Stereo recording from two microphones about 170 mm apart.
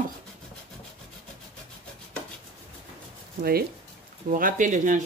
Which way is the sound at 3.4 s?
65° right (ahead or behind).